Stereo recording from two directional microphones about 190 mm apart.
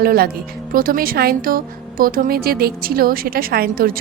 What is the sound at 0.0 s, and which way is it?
Speech, 50° right (ahead or behind).